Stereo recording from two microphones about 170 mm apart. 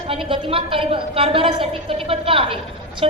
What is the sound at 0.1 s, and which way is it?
A woman's voice, 30° right (ahead or behind).